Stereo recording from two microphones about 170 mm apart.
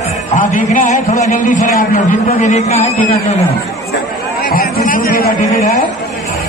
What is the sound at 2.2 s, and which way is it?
Speech, 40° left (ahead or behind).